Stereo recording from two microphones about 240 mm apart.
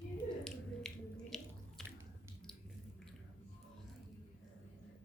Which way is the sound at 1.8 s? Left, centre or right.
Centre.